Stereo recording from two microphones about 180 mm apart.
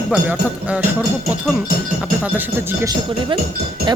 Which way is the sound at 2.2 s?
10° right (ahead or behind).